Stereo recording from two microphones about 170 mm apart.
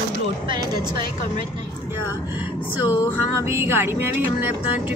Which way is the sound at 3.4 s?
15° right (ahead or behind).